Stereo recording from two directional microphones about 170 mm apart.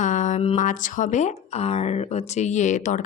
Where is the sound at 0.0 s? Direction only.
45° left (ahead or behind).